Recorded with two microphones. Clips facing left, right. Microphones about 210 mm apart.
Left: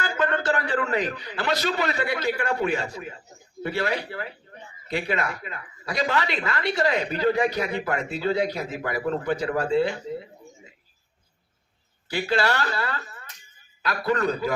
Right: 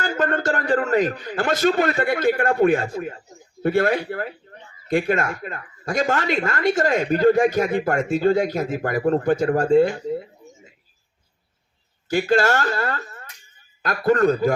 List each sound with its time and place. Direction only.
0.0 s speech: 45° right (ahead or behind)
12.0 s speech: 45° right (ahead or behind)